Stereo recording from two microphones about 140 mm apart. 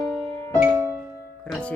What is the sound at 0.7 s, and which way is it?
Music, 15° right (ahead or behind).